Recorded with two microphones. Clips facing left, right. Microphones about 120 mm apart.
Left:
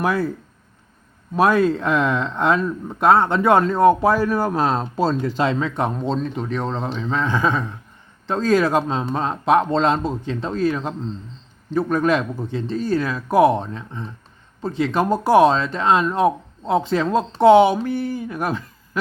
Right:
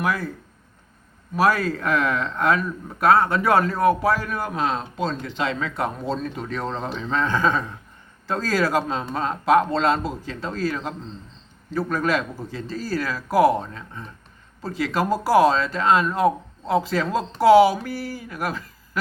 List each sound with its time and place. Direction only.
0.0 s speech: 30° left (ahead or behind)
1.4 s a man's voice: 25° left (ahead or behind)